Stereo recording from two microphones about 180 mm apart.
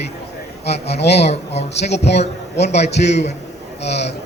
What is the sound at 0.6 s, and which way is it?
A man's voice, 65° left (ahead or behind).